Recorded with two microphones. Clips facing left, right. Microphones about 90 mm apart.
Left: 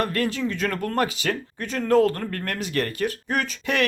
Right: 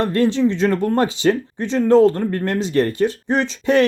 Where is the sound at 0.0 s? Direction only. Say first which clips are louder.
Right 8 dB; 25° right (ahead or behind).